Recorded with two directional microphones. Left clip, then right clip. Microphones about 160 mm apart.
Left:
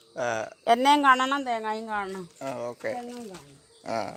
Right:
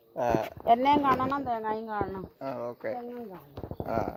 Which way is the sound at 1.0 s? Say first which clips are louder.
Left 5 dB; 45° left (ahead or behind).